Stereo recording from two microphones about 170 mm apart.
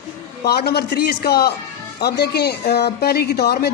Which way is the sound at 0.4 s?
70° left (ahead or behind).